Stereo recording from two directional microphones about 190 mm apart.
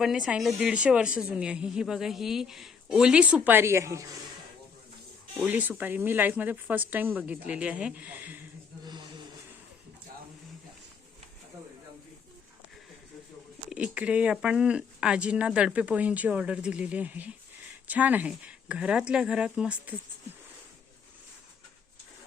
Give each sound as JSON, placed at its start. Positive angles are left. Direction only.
{"t": 0.0, "sound": "a woman's voice", "side_deg": -5}
{"t": 5.4, "sound": "speech", "side_deg": -10}
{"t": 8.8, "sound": "a sound", "side_deg": -25}
{"t": 13.7, "sound": "a woman's voice", "side_deg": -5}